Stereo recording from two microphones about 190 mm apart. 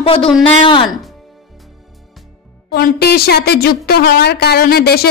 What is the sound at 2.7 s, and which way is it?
A woman's voice, 55° left (ahead or behind).